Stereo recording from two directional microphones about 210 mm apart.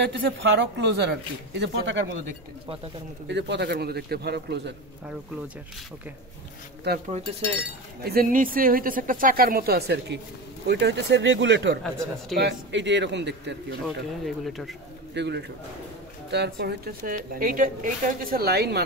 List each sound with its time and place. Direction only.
0.0 s speech: 55° right (ahead or behind)
3.3 s a woman's voice: 55° right (ahead or behind)
7.2 s speech: 30° right (ahead or behind)
8.0 s a woman's voice: 45° right (ahead or behind)
13.8 s speech: centre (ahead or behind)
15.1 s a woman's voice: 55° right (ahead or behind)